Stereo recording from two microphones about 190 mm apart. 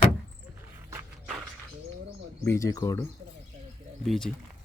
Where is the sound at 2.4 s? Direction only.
15° left (ahead or behind).